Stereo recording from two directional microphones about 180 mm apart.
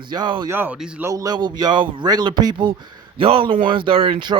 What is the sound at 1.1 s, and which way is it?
A man's voice, 20° right (ahead or behind).